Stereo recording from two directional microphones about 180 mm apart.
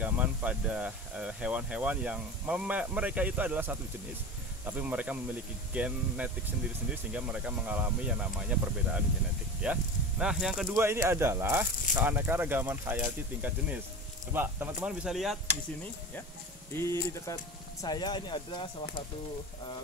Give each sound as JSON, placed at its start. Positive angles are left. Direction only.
{"t": 0.0, "sound": "speech", "side_deg": -10}
{"t": 10.8, "sound": "speech", "side_deg": -15}
{"t": 16.7, "sound": "speech", "side_deg": 15}